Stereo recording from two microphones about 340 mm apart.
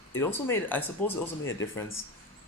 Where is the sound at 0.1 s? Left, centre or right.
Centre.